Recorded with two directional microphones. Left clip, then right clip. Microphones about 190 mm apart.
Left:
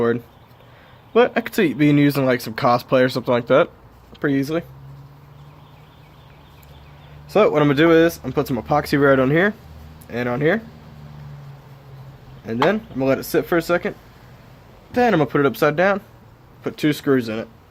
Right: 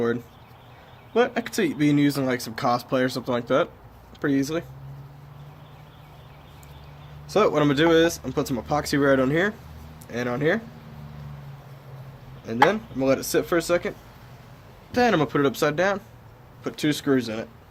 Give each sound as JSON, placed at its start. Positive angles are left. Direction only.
{"t": 1.1, "sound": "speech", "side_deg": 45}
{"t": 7.3, "sound": "speech", "side_deg": 40}
{"t": 12.5, "sound": "speech", "side_deg": 40}
{"t": 14.9, "sound": "speech", "side_deg": 35}